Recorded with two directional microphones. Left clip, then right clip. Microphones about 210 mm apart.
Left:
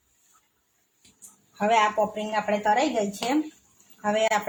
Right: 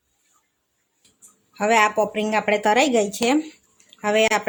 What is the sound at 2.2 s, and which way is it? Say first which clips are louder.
A woman's voice: right 5 dB; 45° right (ahead or behind).